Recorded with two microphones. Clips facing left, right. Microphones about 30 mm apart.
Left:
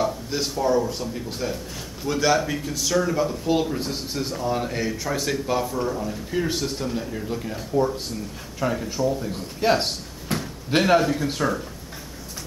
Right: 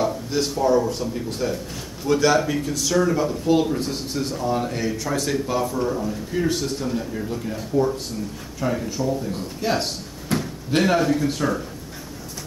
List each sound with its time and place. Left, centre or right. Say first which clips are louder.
0.0 s a sound: right 2 dB; centre
0.8 s a man's voice: right 3 dB; centre
9.6 s speech: left 4 dB; centre